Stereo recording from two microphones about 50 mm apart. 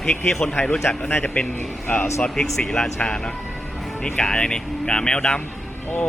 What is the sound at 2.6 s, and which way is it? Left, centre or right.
Speech, centre.